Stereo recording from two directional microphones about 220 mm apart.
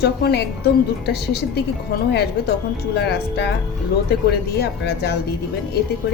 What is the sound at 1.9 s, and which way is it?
Speech, 45° left (ahead or behind).